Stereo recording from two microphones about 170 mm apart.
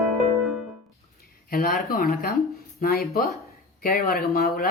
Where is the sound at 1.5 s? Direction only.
60° left (ahead or behind).